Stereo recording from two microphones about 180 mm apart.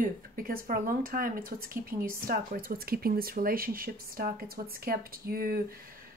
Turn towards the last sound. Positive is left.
turn(degrees=-55)  # may be behind; listen again after turning